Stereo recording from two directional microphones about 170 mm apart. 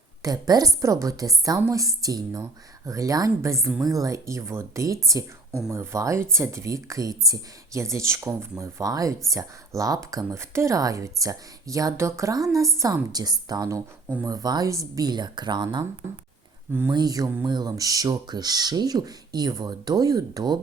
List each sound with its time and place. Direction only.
0.2 s speech: 20° right (ahead or behind)
16.9 s speech: 25° right (ahead or behind)